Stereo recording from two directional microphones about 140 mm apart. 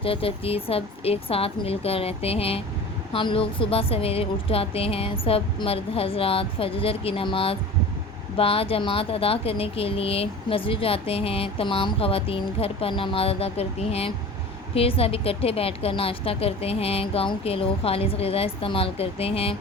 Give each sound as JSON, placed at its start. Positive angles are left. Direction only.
{"t": 0.0, "sound": "speech", "side_deg": 40}